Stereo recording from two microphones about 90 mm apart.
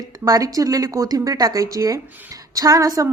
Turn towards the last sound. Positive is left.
turn(degrees=-40)  # may be behind; listen again after turning